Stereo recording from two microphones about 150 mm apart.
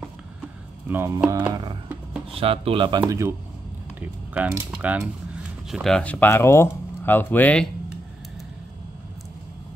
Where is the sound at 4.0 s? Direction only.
10° right (ahead or behind); by 7.6 s 10° left (ahead or behind).